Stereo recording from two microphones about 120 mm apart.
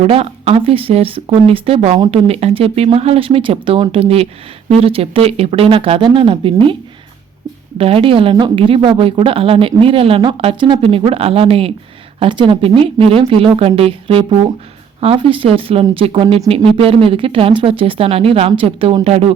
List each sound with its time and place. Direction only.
0.0 s a woman's voice: 55° right (ahead or behind)
7.8 s a woman's voice: 50° right (ahead or behind)
19.0 s speech: 60° right (ahead or behind)